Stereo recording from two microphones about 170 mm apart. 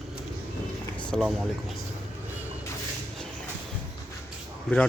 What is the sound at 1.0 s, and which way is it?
Speech, centre (ahead or behind).